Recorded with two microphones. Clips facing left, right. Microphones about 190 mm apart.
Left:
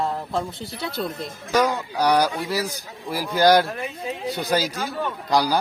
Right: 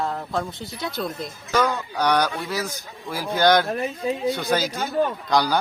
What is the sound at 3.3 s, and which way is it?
Speech, 35° left (ahead or behind).